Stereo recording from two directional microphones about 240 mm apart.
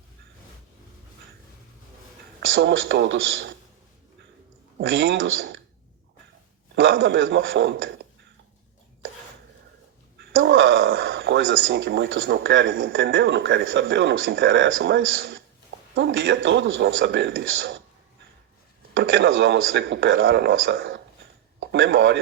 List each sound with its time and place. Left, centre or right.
2.4 s a man's voice: right
4.8 s a man's voice: right
6.7 s a man's voice: right
10.2 s a man's voice: right
18.9 s a man's voice: right